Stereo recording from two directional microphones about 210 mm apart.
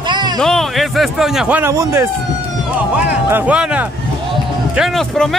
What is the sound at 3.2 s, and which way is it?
A man's voice, 10° right (ahead or behind).